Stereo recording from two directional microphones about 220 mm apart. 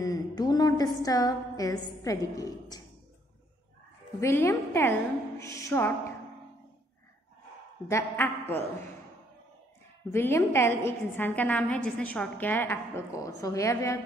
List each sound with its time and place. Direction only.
0.0 s a woman's voice: 15° left (ahead or behind)
4.2 s a woman's voice: 10° left (ahead or behind)
7.9 s a woman's voice: 10° left (ahead or behind)
10.1 s a woman's voice: 10° left (ahead or behind)